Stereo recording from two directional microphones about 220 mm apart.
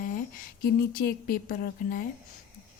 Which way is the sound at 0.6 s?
40° left (ahead or behind).